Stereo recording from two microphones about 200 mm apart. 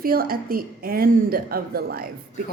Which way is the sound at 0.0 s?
50° right (ahead or behind).